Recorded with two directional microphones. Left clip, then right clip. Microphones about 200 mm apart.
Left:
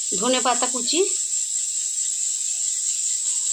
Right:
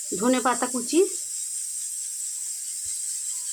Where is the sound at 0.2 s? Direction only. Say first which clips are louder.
Left 2 dB; 45° right (ahead or behind).